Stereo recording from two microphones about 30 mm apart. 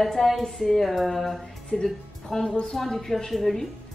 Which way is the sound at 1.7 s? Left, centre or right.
Centre.